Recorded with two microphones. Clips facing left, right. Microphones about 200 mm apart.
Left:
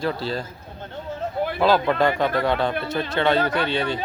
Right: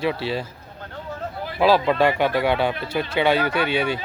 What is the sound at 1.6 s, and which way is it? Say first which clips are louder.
Speech: right 2 dB; 5° right (ahead or behind).